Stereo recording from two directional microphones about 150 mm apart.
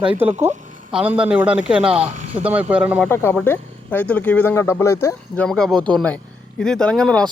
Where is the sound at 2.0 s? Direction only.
55° right (ahead or behind).